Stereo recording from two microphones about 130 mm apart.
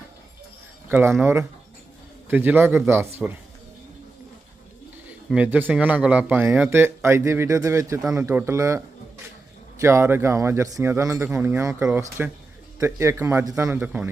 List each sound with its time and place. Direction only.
0.9 s speech: 15° right (ahead or behind)
5.3 s a man's voice: 10° right (ahead or behind)
9.8 s a man's voice: 20° right (ahead or behind)